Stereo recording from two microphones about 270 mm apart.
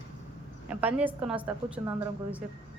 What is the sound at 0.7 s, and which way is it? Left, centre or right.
A woman's voice, centre.